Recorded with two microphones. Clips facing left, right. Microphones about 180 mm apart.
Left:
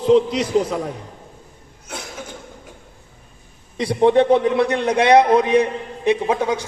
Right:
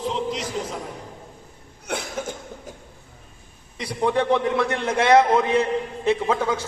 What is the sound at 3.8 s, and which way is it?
A man's voice, 25° left (ahead or behind).